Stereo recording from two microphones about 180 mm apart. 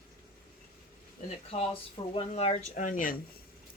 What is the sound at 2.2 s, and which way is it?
Speech, 35° left (ahead or behind).